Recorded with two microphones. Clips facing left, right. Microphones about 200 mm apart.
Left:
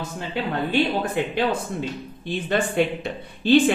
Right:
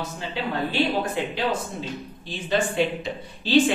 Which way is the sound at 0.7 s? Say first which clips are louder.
Left 2 dB; 55° left (ahead or behind).